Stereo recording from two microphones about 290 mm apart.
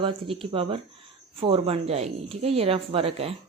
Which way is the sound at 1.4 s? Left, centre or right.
Centre.